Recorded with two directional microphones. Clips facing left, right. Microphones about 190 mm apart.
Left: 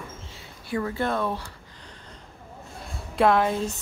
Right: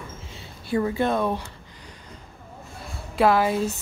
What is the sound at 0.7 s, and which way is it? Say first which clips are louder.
Speech: right 4 dB; 20° right (ahead or behind).